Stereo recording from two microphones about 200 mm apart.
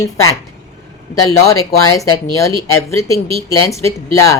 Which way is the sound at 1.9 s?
15° left (ahead or behind).